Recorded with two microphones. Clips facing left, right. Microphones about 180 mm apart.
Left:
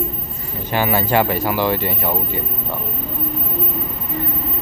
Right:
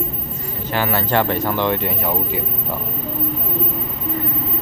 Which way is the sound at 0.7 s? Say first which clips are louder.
Left 2 dB; 15° left (ahead or behind).